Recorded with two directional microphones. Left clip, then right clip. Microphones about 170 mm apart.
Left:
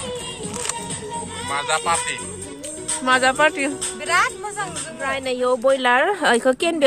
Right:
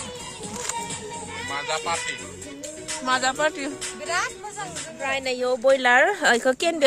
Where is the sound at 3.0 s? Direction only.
25° left (ahead or behind).